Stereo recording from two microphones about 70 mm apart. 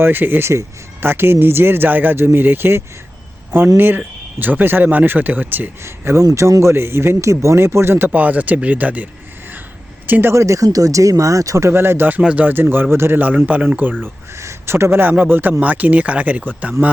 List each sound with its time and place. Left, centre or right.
0.0 s speech: right
8.2 s speech: right
10.1 s speech: right
10.3 s speech: right
11.7 s speech: right
12.2 s speech: centre
14.3 s speech: right